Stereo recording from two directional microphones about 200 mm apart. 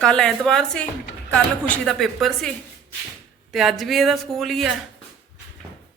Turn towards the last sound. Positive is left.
turn(degrees=0)  # may be behind; listen again after turning